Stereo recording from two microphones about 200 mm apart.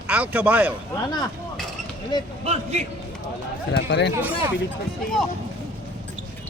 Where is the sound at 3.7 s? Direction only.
55° left (ahead or behind).